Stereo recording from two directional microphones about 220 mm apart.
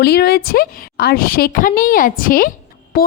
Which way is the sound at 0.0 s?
45° left (ahead or behind).